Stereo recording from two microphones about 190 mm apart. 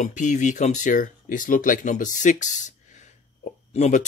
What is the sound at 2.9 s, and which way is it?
Hiccup, 40° left (ahead or behind).